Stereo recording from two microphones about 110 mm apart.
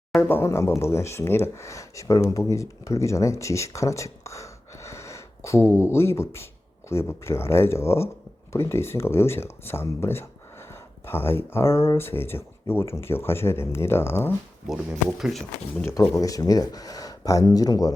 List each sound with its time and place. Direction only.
0.2 s speech: 20° left (ahead or behind)
15.2 s speech: centre (ahead or behind)
15.8 s speech: 20° left (ahead or behind)